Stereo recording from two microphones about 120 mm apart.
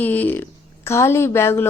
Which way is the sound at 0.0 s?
15° left (ahead or behind).